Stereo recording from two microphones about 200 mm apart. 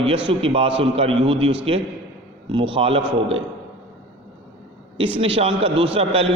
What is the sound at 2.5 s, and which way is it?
Speech, 25° right (ahead or behind).